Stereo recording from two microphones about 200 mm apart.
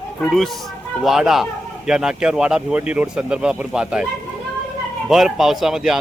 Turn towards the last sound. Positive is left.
turn(degrees=0)  # may be behind; listen again after turning